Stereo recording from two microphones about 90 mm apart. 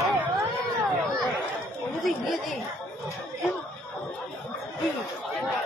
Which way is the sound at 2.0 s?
Centre (ahead or behind).